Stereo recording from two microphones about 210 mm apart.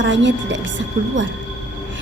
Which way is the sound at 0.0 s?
60° right (ahead or behind).